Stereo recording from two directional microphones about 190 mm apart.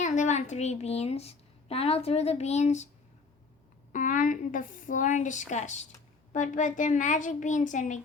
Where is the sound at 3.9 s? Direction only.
45° left (ahead or behind).